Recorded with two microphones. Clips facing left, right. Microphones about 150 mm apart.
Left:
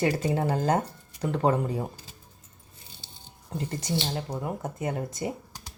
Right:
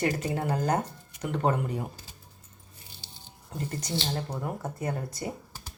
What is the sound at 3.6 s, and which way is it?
Speech, 25° left (ahead or behind).